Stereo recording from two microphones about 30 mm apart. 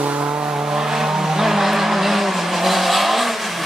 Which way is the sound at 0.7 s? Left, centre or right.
Centre.